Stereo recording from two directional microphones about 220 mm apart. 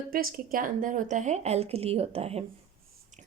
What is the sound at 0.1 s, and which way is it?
Speech, 40° right (ahead or behind).